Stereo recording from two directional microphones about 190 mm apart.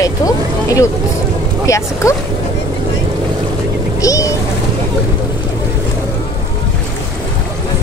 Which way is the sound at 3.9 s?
15° left (ahead or behind).